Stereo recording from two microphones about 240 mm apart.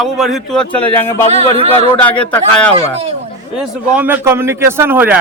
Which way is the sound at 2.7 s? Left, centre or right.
Right.